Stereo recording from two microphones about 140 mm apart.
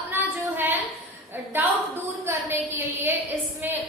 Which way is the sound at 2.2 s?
15° right (ahead or behind).